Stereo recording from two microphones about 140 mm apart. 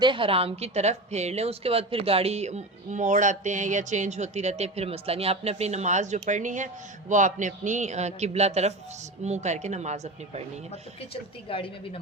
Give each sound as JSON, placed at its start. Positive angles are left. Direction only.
{"t": 0.0, "sound": "a woman's voice", "side_deg": -35}
{"t": 10.7, "sound": "a woman's voice", "side_deg": 40}